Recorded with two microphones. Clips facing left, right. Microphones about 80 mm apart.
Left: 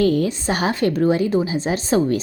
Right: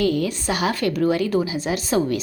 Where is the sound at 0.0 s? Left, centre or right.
Left.